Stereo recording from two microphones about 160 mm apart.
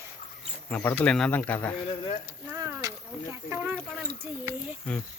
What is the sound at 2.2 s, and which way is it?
Speech, 15° right (ahead or behind).